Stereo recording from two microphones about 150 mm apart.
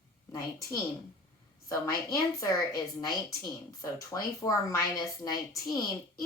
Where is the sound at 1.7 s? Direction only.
20° left (ahead or behind).